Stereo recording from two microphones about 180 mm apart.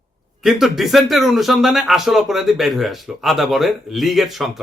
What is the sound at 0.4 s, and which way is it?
Speech, centre (ahead or behind).